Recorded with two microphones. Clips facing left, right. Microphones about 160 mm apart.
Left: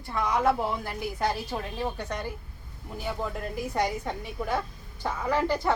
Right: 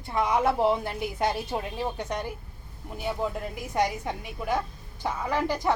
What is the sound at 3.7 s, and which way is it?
A woman's voice, 20° right (ahead or behind).